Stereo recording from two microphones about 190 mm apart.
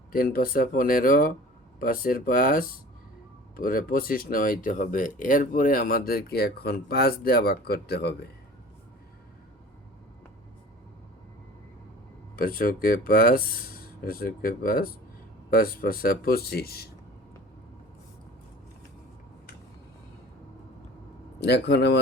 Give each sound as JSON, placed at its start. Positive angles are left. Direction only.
{"t": 0.1, "sound": "speech", "side_deg": 50}
{"t": 12.4, "sound": "speech", "side_deg": 50}
{"t": 21.3, "sound": "a man's voice", "side_deg": 60}